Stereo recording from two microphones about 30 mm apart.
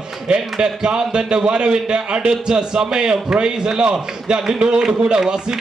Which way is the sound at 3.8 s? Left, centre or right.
Right.